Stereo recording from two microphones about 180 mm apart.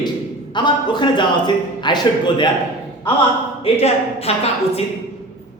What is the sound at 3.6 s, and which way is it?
Speech, 35° left (ahead or behind).